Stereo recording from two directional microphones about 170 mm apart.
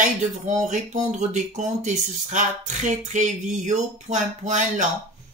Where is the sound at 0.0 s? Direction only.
45° right (ahead or behind).